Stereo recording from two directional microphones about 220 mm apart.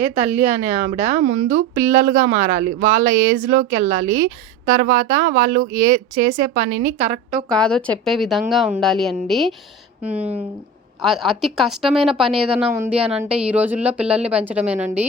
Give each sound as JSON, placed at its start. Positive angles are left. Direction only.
{"t": 0.0, "sound": "speech", "side_deg": -30}
{"t": 1.2, "sound": "speech", "side_deg": -55}
{"t": 1.5, "sound": "speech", "side_deg": -35}
{"t": 7.5, "sound": "a woman's voice", "side_deg": 5}